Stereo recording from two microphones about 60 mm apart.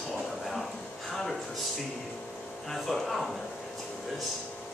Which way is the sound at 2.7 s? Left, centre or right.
Centre.